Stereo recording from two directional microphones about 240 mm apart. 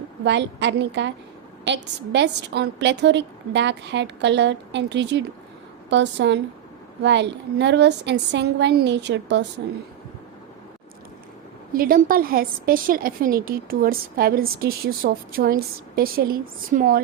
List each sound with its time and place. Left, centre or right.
0.3 s a woman's voice: right
11.7 s a woman's voice: right